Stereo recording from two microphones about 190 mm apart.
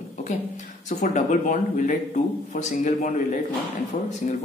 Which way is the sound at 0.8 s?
40° left (ahead or behind).